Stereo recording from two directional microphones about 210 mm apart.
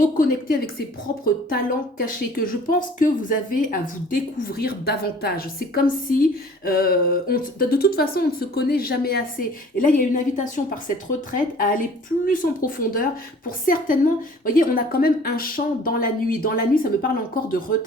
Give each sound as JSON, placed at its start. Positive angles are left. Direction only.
{"t": 0.2, "sound": "a woman's voice", "side_deg": 45}